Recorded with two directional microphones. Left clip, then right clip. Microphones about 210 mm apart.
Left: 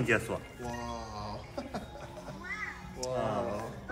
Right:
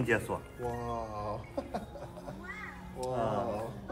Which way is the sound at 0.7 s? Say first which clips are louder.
Right 4 dB; 40° right (ahead or behind).